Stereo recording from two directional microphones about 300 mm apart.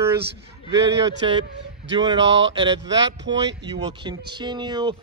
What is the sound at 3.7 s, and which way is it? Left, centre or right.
Speech, centre.